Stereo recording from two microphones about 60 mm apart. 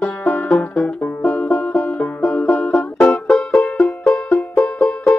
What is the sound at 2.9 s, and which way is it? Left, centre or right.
Music, left.